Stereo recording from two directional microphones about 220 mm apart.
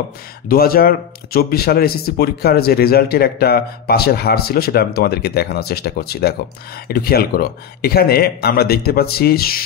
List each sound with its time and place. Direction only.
0.5 s speech: 45° left (ahead or behind)